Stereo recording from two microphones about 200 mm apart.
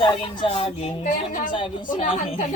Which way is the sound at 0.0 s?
25° left (ahead or behind).